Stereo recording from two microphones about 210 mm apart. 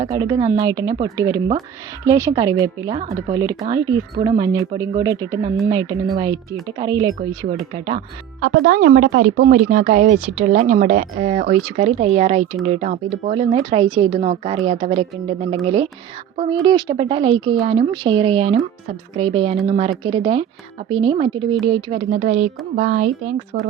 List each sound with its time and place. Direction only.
0.0 s a woman's voice: 15° right (ahead or behind)
8.4 s a woman's voice: 45° right (ahead or behind)